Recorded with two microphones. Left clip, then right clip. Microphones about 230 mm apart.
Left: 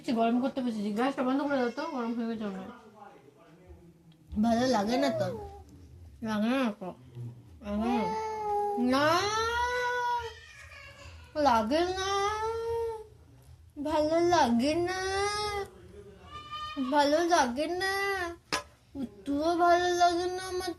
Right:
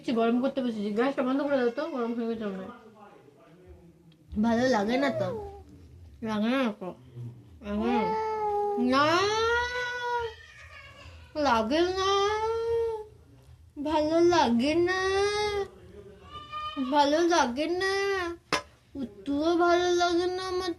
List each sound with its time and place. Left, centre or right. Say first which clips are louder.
0.0 s speech: right 2 dB; left
4.4 s a child's voice: right 2 dB; left
8.0 s cat: right 4 dB; centre
8.8 s cat: right 3 dB; left
11.3 s baby cry: right 1 dB; left
13.8 s speech: right 3 dB; left
16.9 s speech: right 2 dB; left